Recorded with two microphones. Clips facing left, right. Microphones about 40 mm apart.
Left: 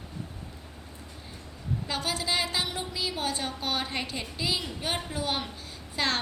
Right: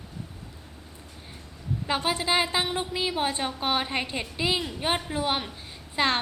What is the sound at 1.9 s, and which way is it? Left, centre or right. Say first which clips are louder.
A woman's voice: right 5 dB; right.